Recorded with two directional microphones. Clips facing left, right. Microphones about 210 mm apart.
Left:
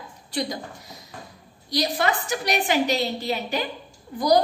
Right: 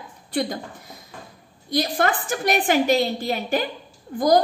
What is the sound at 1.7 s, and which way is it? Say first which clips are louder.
A woman's voice: right 2 dB; 50° right (ahead or behind).